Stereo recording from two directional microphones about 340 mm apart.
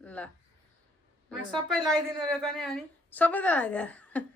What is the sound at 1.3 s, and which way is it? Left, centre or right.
A woman's voice, centre.